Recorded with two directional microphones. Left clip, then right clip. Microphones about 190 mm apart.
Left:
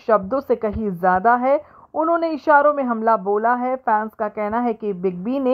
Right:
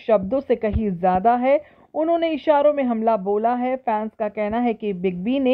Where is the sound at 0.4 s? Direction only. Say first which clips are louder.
Left 1 dB; 35° left (ahead or behind).